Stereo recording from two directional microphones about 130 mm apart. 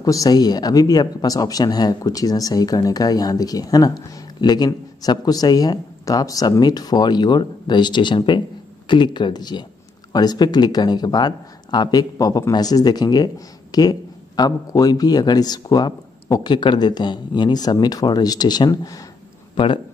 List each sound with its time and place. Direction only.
0.0 s a man's voice: 25° left (ahead or behind)